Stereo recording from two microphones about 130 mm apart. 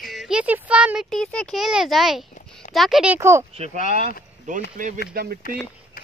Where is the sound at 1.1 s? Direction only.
5° left (ahead or behind).